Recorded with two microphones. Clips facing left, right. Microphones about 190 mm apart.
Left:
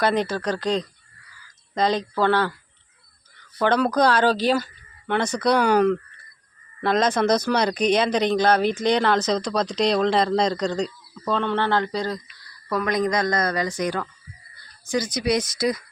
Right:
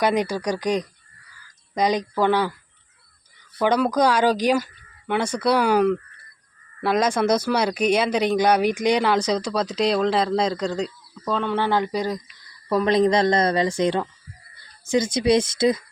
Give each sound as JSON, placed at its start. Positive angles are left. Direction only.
{"t": 0.0, "sound": "speech", "side_deg": -15}
{"t": 3.6, "sound": "speech", "side_deg": -10}
{"t": 12.6, "sound": "speech", "side_deg": -25}